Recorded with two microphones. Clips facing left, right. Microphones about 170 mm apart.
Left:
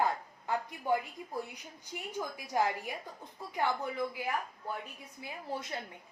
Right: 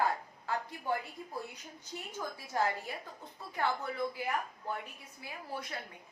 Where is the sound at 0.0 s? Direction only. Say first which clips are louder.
Left 1 dB; 15° left (ahead or behind).